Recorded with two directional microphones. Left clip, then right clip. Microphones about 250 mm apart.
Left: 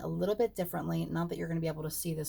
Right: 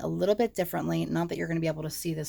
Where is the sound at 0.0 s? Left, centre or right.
Right.